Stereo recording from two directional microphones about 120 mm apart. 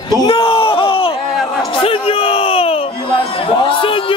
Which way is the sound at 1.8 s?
50° left (ahead or behind).